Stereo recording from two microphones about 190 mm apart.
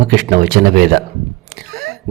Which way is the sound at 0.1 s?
50° right (ahead or behind).